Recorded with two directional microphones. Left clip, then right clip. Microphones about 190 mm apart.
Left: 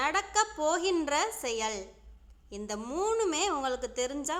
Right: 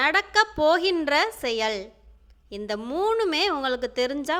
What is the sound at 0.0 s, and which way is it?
A woman's voice, 20° right (ahead or behind).